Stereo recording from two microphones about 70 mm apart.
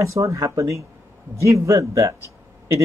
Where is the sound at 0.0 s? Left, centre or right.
Right.